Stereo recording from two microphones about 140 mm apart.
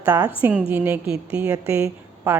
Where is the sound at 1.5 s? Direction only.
20° right (ahead or behind).